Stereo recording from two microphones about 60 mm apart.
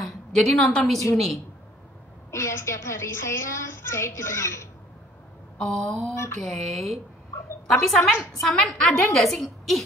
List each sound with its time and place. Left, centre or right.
0.0 s a woman's voice: centre
2.3 s a woman's voice: left
5.6 s mantra: centre
6.4 s a woman's voice: centre